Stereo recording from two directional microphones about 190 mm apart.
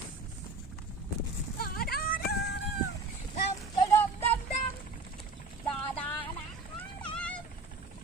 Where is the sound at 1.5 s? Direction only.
55° left (ahead or behind).